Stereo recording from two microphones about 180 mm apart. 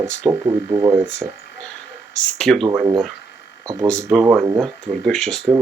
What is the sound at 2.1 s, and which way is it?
Speech, 40° left (ahead or behind).